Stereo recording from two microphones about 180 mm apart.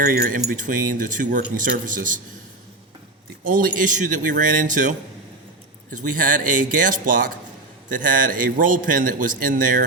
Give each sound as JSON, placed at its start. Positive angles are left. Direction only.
{"t": 0.0, "sound": "a man's voice", "side_deg": -50}
{"t": 3.4, "sound": "a man's voice", "side_deg": -50}